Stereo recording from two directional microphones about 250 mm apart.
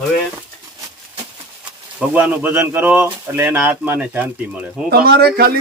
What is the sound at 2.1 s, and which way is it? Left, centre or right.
Speech, centre.